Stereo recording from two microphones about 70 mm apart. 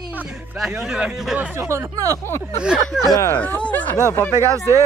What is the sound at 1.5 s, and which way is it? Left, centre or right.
Speech, right.